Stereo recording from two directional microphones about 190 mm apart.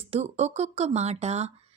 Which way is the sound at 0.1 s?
35° right (ahead or behind).